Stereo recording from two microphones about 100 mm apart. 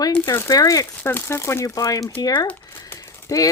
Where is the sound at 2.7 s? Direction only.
25° left (ahead or behind).